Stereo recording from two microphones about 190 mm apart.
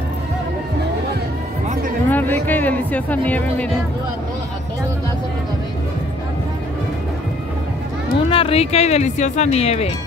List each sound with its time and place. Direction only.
1.7 s music: 45° right (ahead or behind)
2.0 s speech: 10° left (ahead or behind)
8.2 s speech: 30° left (ahead or behind)